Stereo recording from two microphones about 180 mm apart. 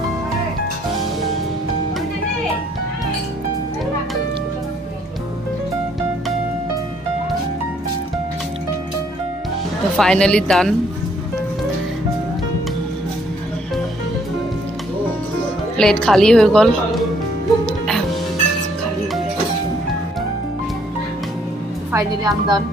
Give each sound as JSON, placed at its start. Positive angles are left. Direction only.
{"t": 9.9, "sound": "a woman's voice", "side_deg": 5}
{"t": 15.8, "sound": "a woman's voice", "side_deg": 5}
{"t": 17.6, "sound": "music", "side_deg": 5}
{"t": 21.9, "sound": "a woman's voice", "side_deg": -20}